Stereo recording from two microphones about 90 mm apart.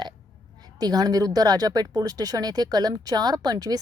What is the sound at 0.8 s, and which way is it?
Speech, 50° right (ahead or behind).